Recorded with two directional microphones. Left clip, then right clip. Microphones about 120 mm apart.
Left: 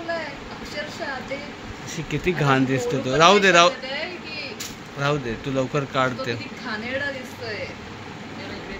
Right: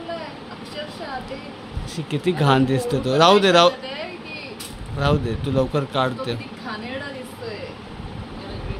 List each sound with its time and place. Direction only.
2.0 s speech: 30° right (ahead or behind)
4.9 s speech: 30° right (ahead or behind)